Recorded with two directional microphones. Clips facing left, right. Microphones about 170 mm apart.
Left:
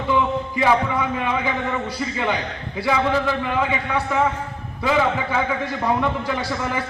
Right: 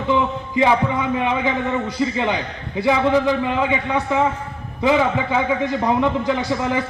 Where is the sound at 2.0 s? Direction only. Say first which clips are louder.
Right 3 dB; 20° right (ahead or behind).